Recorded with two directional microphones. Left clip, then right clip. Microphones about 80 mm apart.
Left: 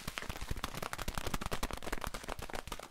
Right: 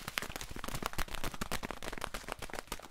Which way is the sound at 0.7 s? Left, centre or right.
Right.